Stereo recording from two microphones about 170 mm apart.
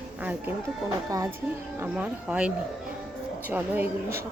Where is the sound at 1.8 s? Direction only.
10° right (ahead or behind).